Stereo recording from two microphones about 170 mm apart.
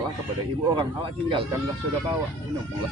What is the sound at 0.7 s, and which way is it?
Speech, 30° right (ahead or behind).